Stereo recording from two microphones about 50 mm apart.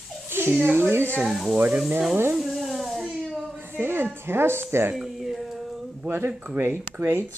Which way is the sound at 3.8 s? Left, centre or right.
Right.